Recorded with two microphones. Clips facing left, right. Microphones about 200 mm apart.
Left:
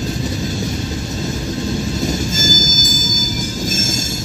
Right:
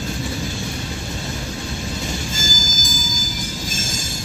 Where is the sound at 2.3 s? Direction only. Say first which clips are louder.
Left 7 dB; 45° left (ahead or behind).